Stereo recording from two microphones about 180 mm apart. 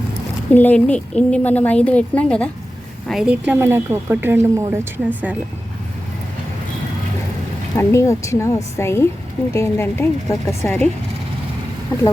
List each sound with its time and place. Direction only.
0.5 s a woman's voice: 10° left (ahead or behind); by 5.4 s 10° right (ahead or behind)
7.8 s a woman's voice: 15° left (ahead or behind)